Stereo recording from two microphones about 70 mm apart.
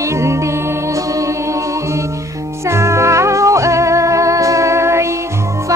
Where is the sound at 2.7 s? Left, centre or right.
Right.